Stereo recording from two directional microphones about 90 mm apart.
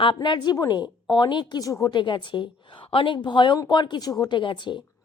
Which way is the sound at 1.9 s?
60° left (ahead or behind).